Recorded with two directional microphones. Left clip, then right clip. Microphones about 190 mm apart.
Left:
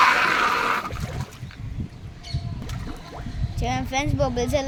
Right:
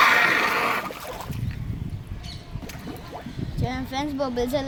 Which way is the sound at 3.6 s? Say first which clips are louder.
Left 4 dB; 35° left (ahead or behind).